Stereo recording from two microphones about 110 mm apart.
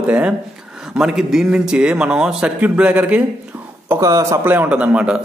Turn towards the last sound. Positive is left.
turn(degrees=-10)  # may be behind; listen again after turning